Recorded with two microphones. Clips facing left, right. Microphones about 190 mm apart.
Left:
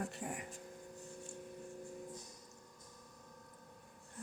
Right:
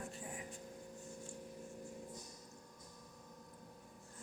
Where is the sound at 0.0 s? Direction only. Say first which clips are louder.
Left 5 dB; 70° left (ahead or behind).